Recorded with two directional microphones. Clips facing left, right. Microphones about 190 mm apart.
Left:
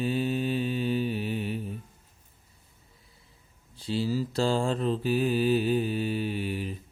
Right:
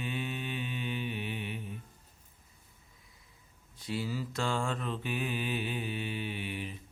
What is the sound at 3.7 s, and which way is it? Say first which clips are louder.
Mantra: left 7 dB; 30° left (ahead or behind).